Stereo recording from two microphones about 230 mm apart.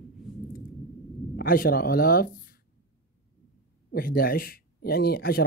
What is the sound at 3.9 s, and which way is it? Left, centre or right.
Speech, left.